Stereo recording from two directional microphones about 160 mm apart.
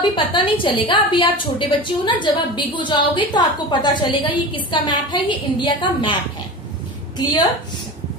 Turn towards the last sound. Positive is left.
turn(degrees=25)  # may be behind; listen again after turning